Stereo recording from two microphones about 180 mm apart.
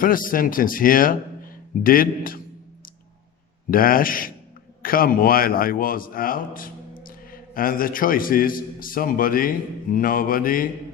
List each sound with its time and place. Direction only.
0.0 s a man's voice: 50° left (ahead or behind)
3.7 s a man's voice: 50° left (ahead or behind)